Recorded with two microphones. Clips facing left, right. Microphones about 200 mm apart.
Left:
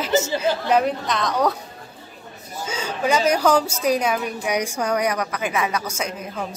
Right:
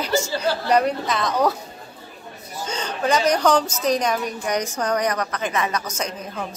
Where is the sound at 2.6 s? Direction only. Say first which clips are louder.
Even; 5° left (ahead or behind).